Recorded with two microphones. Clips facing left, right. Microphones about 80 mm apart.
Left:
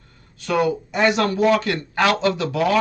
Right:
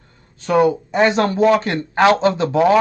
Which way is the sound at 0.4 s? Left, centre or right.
Right.